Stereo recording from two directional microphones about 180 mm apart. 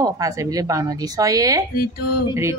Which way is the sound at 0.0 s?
20° right (ahead or behind).